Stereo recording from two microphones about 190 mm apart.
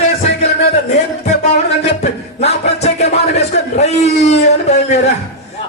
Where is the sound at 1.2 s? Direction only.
40° left (ahead or behind).